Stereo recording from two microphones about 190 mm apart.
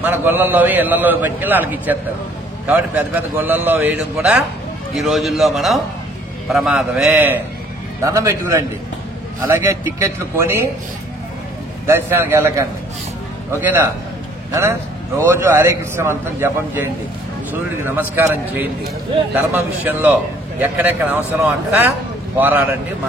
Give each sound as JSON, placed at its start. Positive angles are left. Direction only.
{"t": 0.0, "sound": "a man's voice", "side_deg": -10}
{"t": 11.8, "sound": "a man's voice", "side_deg": -10}